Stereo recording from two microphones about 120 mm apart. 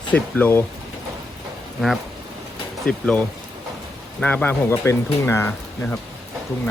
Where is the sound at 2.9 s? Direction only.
10° left (ahead or behind).